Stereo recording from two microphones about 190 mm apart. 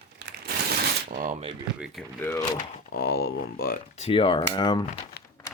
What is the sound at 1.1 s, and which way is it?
Speech, 45° right (ahead or behind).